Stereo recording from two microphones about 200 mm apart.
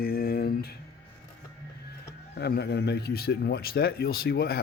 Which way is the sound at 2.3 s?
55° left (ahead or behind).